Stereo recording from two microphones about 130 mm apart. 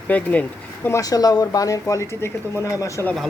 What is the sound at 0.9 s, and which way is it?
Speech, 25° left (ahead or behind).